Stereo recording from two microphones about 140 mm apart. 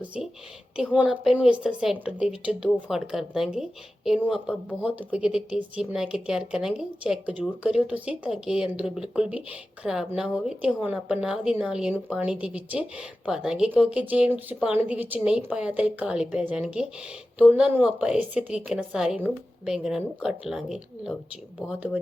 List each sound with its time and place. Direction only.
0.0 s a woman's voice: 10° right (ahead or behind)